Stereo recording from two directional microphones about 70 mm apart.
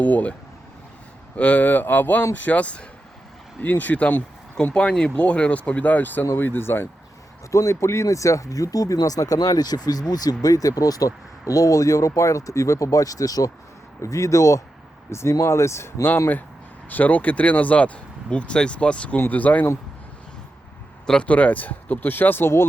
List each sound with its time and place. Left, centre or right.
0.0 s speech: left
1.4 s speech: left
7.5 s speech: left
15.1 s speech: left
16.9 s speech: left
21.1 s speech: centre; by 22.6 s left